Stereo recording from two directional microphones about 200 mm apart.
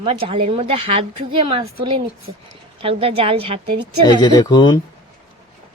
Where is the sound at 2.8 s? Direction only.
30° right (ahead or behind).